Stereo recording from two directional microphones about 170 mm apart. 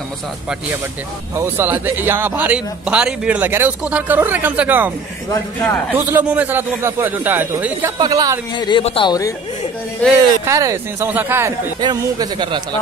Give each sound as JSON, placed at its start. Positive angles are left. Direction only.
{"t": 1.3, "sound": "speech", "side_deg": -15}
{"t": 5.3, "sound": "a man's voice", "side_deg": 15}
{"t": 5.9, "sound": "speech", "side_deg": -10}
{"t": 8.0, "sound": "speech", "side_deg": -20}
{"t": 8.5, "sound": "speech", "side_deg": 25}
{"t": 10.0, "sound": "a man's voice", "side_deg": 5}
{"t": 10.4, "sound": "speech", "side_deg": -20}